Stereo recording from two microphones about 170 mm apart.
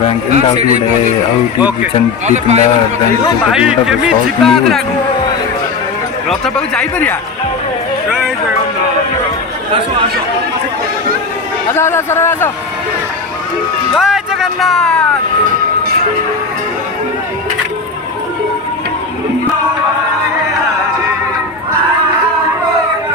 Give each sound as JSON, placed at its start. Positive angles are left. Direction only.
{"t": 0.3, "sound": "speech", "side_deg": -40}
{"t": 2.2, "sound": "speech", "side_deg": -40}
{"t": 3.5, "sound": "speech", "side_deg": -5}
{"t": 6.2, "sound": "speech", "side_deg": 5}
{"t": 11.7, "sound": "speech", "side_deg": 15}
{"t": 13.9, "sound": "speech", "side_deg": 0}